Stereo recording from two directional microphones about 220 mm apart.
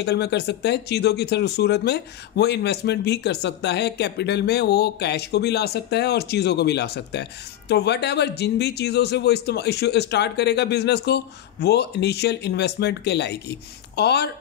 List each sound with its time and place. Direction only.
0.0 s speech: 50° left (ahead or behind)